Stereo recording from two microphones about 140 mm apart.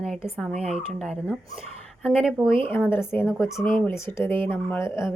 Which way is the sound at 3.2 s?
Centre (ahead or behind).